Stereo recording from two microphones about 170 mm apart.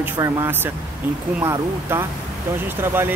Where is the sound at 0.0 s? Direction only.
10° right (ahead or behind).